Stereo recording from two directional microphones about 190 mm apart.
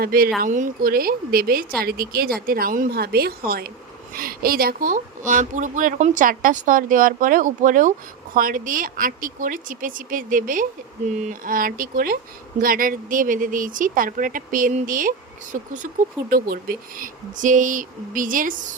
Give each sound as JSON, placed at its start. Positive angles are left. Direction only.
{"t": 0.0, "sound": "speech", "side_deg": -50}